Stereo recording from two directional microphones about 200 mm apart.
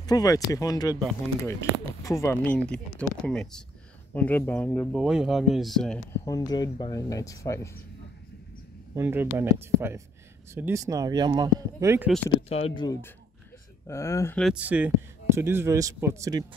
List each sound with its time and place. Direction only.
0.0 s speech: 20° left (ahead or behind); by 5.9 s centre (ahead or behind)
6.2 s speech: 20° left (ahead or behind)
8.9 s speech: 10° right (ahead or behind)
12.4 s speech: 30° left (ahead or behind); by 14.4 s 15° left (ahead or behind)
14.4 s speech: 5° right (ahead or behind)